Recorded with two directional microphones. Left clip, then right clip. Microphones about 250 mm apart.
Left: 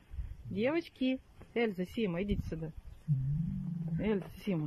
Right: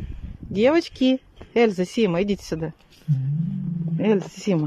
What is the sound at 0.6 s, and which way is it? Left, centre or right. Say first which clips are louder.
Speech: right 15 dB; centre.